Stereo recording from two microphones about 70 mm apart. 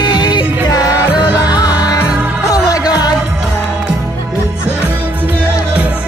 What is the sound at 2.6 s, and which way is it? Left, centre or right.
Music, left.